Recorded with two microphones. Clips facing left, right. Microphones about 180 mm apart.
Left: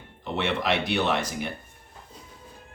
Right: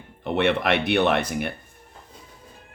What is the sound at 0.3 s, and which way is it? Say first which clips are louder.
Speech: right 5 dB; 60° right (ahead or behind).